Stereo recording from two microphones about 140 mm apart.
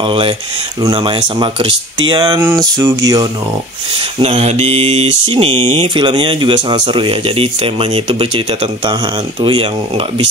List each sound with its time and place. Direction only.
0.0 s speech: 40° right (ahead or behind)
2.5 s a sound: 25° right (ahead or behind)
4.2 s speech: 50° right (ahead or behind)
9.4 s speech: 35° right (ahead or behind)